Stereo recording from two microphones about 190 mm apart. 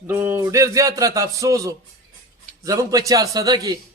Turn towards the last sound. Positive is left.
turn(degrees=-20)  # may be behind; listen again after turning